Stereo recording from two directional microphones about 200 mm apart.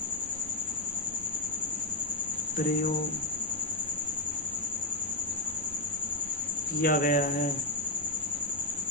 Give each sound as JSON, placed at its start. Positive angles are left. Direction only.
{"t": 6.8, "sound": "speech", "side_deg": 45}